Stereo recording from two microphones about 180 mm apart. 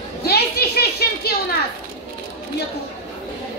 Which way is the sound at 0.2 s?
60° left (ahead or behind).